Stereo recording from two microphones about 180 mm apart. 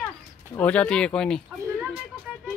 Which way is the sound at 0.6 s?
5° left (ahead or behind).